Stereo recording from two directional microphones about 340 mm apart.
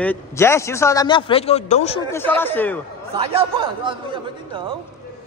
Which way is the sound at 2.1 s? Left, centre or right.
Centre.